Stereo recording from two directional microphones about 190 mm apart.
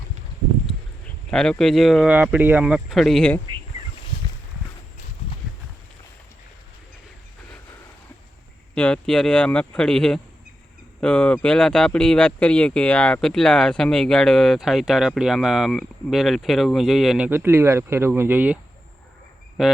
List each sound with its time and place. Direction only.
1.3 s speech: 5° left (ahead or behind)
8.7 s speech: 5° left (ahead or behind)